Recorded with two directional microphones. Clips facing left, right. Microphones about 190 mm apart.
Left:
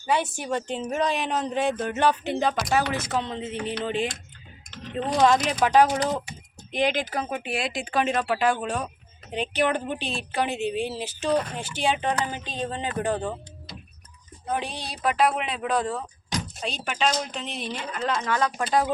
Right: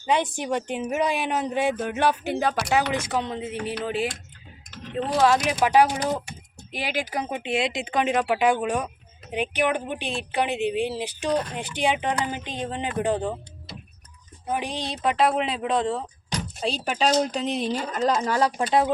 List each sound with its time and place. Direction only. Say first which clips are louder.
0.1 s a woman's voice: right 2 dB; 15° right (ahead or behind)
14.4 s speech: right 2 dB; 15° right (ahead or behind); by 18.5 s 35° right (ahead or behind)
18.5 s speech: right 2 dB; 20° right (ahead or behind)